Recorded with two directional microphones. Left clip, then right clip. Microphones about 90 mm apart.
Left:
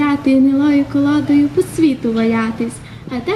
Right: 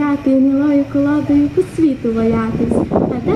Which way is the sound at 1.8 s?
35° left (ahead or behind).